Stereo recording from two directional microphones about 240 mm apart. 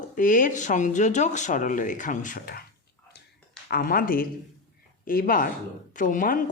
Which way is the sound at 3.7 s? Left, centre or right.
Left.